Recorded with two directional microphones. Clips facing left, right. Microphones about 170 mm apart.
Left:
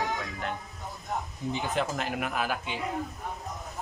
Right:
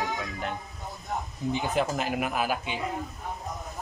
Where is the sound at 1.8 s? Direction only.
10° right (ahead or behind).